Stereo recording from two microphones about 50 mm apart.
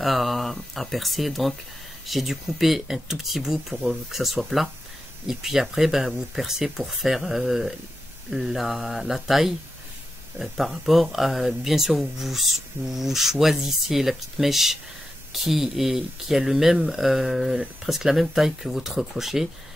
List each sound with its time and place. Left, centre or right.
0.0 s speech: centre
10.7 s speech: centre